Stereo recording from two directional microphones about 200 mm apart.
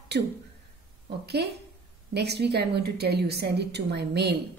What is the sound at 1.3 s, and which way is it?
A woman's voice, 55° right (ahead or behind).